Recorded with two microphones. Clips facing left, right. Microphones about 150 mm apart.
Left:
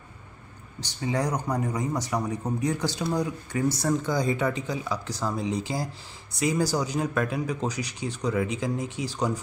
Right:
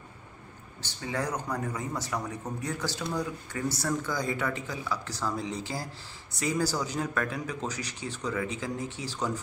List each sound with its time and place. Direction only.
0.7 s speech: 15° left (ahead or behind)